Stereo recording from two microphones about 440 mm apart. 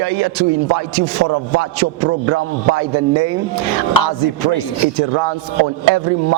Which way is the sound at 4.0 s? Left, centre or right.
Left.